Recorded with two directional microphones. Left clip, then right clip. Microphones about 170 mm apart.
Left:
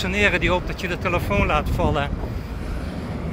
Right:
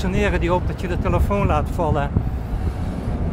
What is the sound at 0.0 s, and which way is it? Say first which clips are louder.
Speech: left 3 dB; 15° right (ahead or behind).